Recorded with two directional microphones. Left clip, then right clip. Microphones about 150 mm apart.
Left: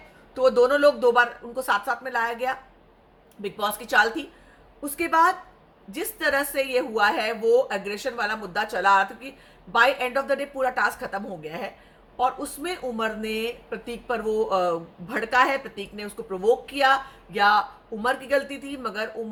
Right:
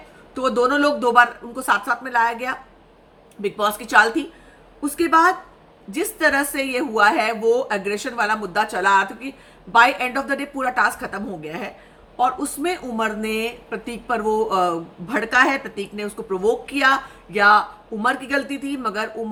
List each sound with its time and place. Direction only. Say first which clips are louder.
0.3 s speech: even; 15° right (ahead or behind)